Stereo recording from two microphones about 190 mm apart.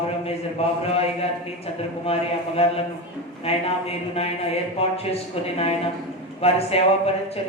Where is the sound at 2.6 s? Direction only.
30° left (ahead or behind).